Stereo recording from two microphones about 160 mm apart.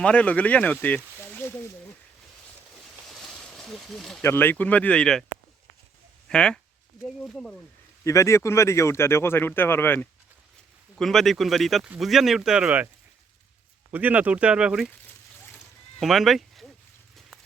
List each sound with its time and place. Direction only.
0.0 s speech: 5° left (ahead or behind)
3.1 s a sound: centre (ahead or behind)
4.2 s speech: 15° left (ahead or behind)
6.2 s speech: 5° left (ahead or behind)
8.0 s speech: 20° left (ahead or behind)
10.9 s speech: centre (ahead or behind)
13.9 s speech: 10° right (ahead or behind)
16.0 s speech: centre (ahead or behind)